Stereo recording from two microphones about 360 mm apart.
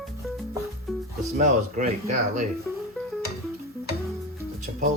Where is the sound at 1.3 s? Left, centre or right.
Centre.